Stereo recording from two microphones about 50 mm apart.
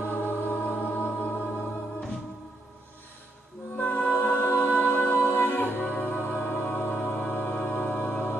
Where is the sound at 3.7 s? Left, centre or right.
Left.